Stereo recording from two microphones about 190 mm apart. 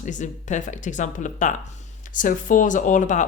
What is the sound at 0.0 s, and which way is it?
Speech, 40° left (ahead or behind).